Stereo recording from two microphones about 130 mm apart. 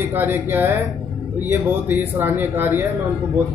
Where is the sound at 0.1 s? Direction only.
15° right (ahead or behind).